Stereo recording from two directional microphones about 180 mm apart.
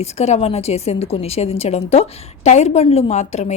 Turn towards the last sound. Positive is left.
turn(degrees=40)  # may be behind; listen again after turning